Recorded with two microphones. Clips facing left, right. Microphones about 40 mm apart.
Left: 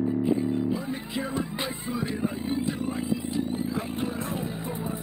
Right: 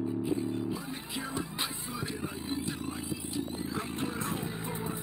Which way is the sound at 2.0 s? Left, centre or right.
Centre.